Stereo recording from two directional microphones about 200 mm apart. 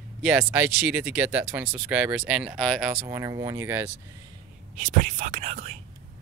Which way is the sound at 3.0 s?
15° right (ahead or behind).